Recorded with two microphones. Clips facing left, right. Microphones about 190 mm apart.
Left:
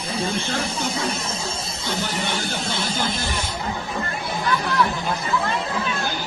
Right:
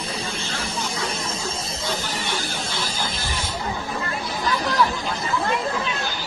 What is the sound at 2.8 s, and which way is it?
Music, 25° left (ahead or behind).